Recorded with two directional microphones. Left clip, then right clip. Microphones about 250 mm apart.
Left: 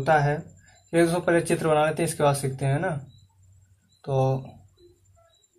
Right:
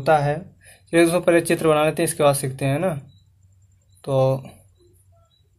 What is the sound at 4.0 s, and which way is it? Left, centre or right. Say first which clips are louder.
Speech: right 6 dB; right.